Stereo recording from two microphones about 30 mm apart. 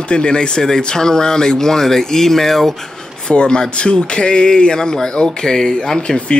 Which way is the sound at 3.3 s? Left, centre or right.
Left.